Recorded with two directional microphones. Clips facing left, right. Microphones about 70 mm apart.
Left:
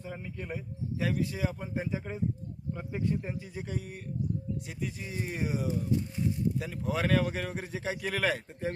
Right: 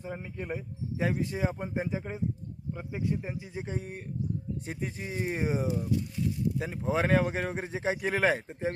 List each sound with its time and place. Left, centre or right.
0.0 s speech: centre